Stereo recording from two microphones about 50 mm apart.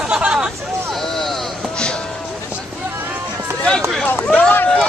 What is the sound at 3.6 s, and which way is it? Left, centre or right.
Speech, centre.